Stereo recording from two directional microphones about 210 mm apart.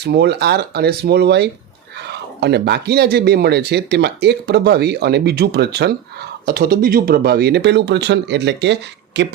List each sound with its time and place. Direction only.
0.0 s speech: 55° right (ahead or behind)